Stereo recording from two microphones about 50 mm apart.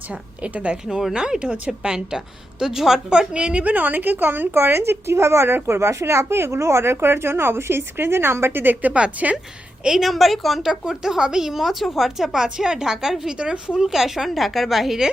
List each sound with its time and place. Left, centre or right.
0.1 s a woman's voice: right
0.9 s speech: centre
1.1 s a woman's voice: centre; by 8.9 s right
8.9 s a woman's voice: right
10.0 s a woman's voice: centre
13.8 s a woman's voice: centre